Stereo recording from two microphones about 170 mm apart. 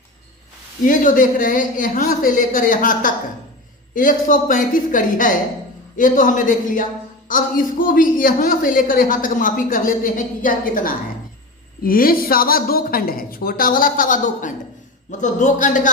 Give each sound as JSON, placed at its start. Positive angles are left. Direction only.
{"t": 0.9, "sound": "a woman's voice", "side_deg": 50}